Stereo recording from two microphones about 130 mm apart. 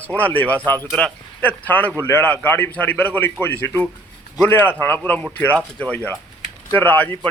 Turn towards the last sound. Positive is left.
turn(degrees=15)  # may be behind; listen again after turning